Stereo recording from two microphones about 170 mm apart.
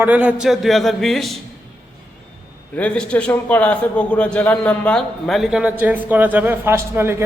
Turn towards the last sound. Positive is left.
turn(degrees=-15)  # may be behind; listen again after turning